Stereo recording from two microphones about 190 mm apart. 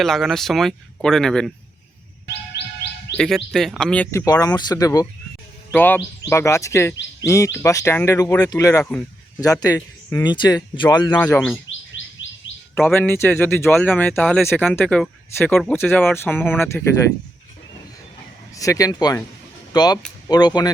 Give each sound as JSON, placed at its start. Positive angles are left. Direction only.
{"t": 0.0, "sound": "speech", "side_deg": 0}
{"t": 3.2, "sound": "speech", "side_deg": 0}
{"t": 4.3, "sound": "speech", "side_deg": 20}
{"t": 8.8, "sound": "speech", "side_deg": 5}
{"t": 9.4, "sound": "speech", "side_deg": 20}
{"t": 11.3, "sound": "speech", "side_deg": 5}
{"t": 12.0, "sound": "chirp", "side_deg": 90}
{"t": 12.7, "sound": "speech", "side_deg": 10}
{"t": 18.5, "sound": "speech", "side_deg": 15}